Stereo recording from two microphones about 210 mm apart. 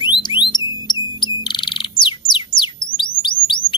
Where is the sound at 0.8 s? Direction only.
20° left (ahead or behind).